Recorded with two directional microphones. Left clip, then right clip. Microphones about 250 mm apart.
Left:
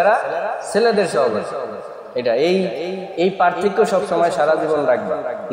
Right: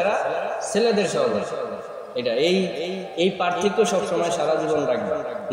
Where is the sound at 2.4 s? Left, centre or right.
Left.